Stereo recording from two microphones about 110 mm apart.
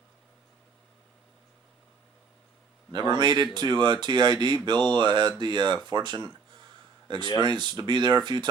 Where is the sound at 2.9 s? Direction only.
40° right (ahead or behind).